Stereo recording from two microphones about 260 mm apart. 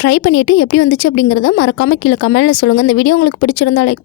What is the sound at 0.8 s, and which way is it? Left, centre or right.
Speech, left.